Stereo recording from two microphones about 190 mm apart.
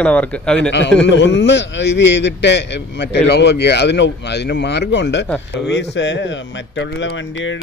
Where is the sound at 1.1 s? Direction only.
65° left (ahead or behind).